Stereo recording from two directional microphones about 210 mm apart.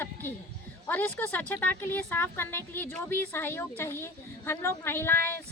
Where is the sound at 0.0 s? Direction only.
10° left (ahead or behind).